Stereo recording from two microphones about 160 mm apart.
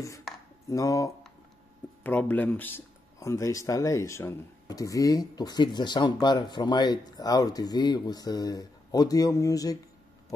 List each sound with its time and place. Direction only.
0.7 s speech: 20° left (ahead or behind)
2.0 s speech: 10° left (ahead or behind)